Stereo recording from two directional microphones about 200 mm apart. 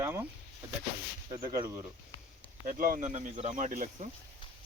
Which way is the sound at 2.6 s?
45° right (ahead or behind).